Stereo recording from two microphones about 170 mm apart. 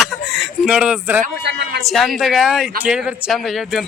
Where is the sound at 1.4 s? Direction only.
70° right (ahead or behind).